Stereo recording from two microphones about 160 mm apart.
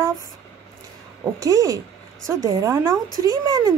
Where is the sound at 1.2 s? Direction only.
20° right (ahead or behind).